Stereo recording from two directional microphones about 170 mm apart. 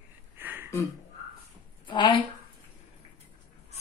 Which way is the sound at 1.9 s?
25° left (ahead or behind).